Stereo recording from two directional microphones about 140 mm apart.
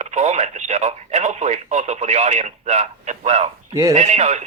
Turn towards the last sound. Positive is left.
turn(degrees=-50)  # may be behind; listen again after turning